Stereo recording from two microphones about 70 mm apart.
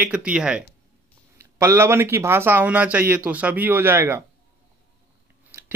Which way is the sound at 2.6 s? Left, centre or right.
Right.